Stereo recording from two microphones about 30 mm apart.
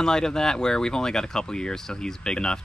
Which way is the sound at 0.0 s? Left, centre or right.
Left.